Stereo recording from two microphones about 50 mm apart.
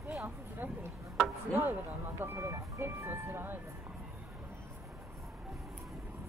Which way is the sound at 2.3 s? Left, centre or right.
Right.